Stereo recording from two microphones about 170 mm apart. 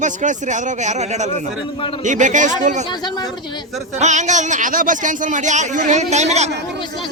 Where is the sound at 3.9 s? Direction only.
45° right (ahead or behind).